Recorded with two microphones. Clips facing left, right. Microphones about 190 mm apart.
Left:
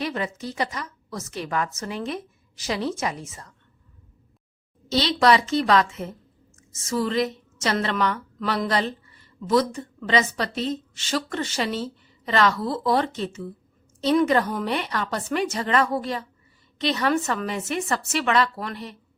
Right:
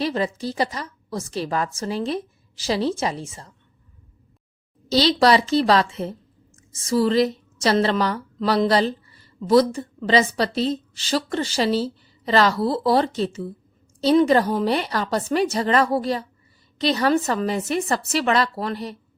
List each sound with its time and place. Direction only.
0.0 s a woman's voice: 30° right (ahead or behind)
4.9 s a woman's voice: 35° right (ahead or behind)